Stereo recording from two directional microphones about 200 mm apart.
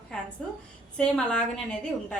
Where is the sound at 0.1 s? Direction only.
5° left (ahead or behind).